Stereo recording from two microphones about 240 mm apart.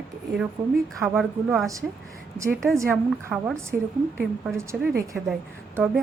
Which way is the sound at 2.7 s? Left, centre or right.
Centre.